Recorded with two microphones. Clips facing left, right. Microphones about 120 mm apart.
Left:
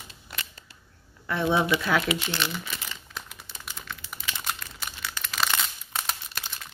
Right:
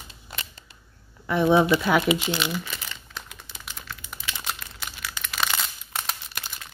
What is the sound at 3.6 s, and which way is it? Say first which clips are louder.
Crumpling: even; centre (ahead or behind).